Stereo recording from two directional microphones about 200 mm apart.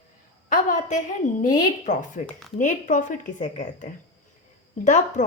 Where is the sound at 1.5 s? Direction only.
40° left (ahead or behind).